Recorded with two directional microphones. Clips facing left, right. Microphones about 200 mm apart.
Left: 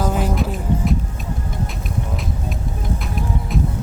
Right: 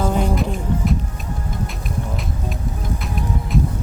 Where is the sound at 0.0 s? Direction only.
5° left (ahead or behind).